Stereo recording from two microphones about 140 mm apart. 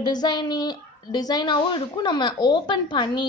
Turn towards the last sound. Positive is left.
turn(degrees=35)  # may be behind; listen again after turning